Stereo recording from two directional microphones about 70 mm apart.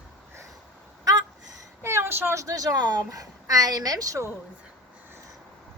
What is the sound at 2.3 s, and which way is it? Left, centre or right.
A woman's voice, right.